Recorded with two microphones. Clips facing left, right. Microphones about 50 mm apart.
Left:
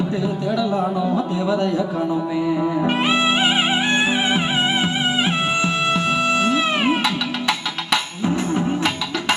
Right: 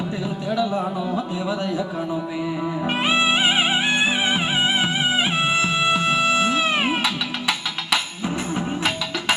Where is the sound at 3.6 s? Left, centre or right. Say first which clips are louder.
Left 1 dB; centre.